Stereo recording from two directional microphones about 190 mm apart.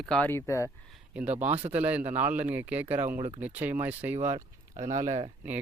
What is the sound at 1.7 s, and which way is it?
Speech, 10° right (ahead or behind).